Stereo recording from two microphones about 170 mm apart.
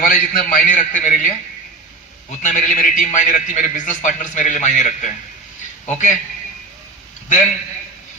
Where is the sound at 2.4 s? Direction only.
45° left (ahead or behind).